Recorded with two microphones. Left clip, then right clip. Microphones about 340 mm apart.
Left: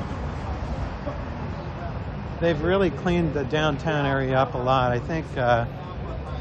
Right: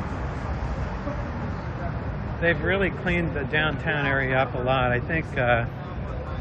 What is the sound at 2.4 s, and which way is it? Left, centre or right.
Speech, centre.